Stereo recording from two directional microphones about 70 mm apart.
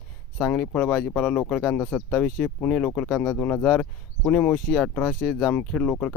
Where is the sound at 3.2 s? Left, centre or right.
Left.